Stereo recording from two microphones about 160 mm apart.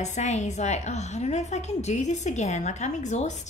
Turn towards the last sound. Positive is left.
turn(degrees=45)  # may be behind; listen again after turning